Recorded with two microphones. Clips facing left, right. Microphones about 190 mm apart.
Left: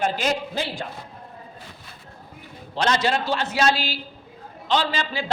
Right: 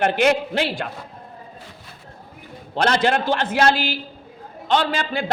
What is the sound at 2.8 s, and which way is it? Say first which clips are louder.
Speech: right 3 dB; 55° right (ahead or behind).